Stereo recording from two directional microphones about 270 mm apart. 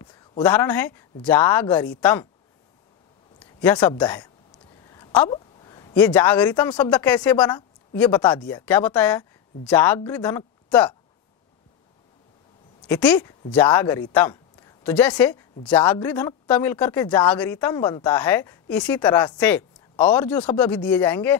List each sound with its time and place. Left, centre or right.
0.0 s a sound: centre
0.4 s speech: centre
3.6 s speech: centre
4.8 s a sound: centre
5.9 s speech: centre
12.8 s speech: centre